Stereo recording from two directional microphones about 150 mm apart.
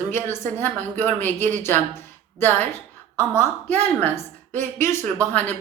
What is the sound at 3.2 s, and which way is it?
A woman's voice, 15° left (ahead or behind).